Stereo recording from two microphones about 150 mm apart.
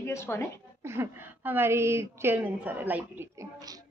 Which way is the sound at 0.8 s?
15° right (ahead or behind).